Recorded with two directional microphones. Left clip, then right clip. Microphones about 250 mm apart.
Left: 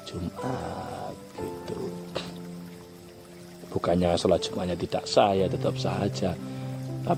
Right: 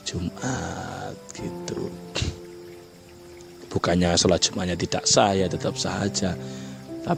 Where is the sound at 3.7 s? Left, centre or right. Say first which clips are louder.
Right 2 dB; right.